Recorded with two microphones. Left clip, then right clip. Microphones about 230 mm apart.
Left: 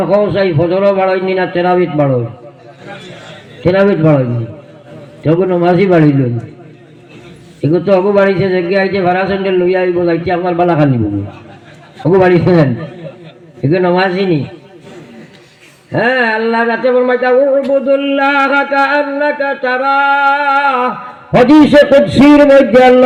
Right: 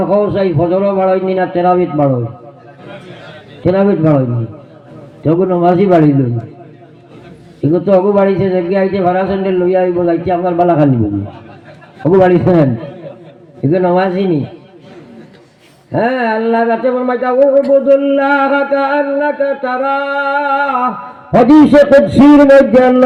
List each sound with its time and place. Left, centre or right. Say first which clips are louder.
0.1 s speech: left 3 dB; right
3.6 s speech: left 2 dB; right
5.2 s speech: even; right
7.6 s speech: even; right
12.1 s speech: even; right
13.7 s speech: even; right
15.9 s speech: left 2 dB; right